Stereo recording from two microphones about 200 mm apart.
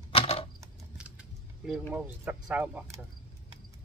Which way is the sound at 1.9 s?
5° right (ahead or behind).